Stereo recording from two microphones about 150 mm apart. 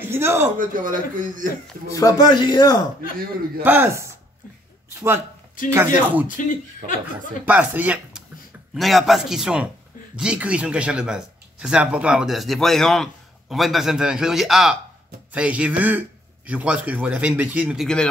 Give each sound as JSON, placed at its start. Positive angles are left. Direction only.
{"t": 0.0, "sound": "speech", "side_deg": -15}
{"t": 0.6, "sound": "speech", "side_deg": -65}
{"t": 1.9, "sound": "speech", "side_deg": 20}
{"t": 3.6, "sound": "speech", "side_deg": -15}
{"t": 5.9, "sound": "speech", "side_deg": -10}
{"t": 6.2, "sound": "speech", "side_deg": 60}
{"t": 7.4, "sound": "speech", "side_deg": -10}
{"t": 8.7, "sound": "a man's voice", "side_deg": 0}